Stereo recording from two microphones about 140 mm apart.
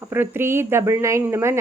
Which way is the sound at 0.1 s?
15° right (ahead or behind).